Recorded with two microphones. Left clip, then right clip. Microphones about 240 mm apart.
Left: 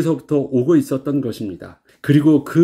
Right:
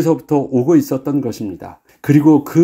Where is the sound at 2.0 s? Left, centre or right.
Right.